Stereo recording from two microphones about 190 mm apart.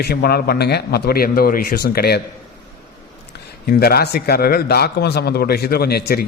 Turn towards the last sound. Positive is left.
turn(degrees=55)  # may be behind; listen again after turning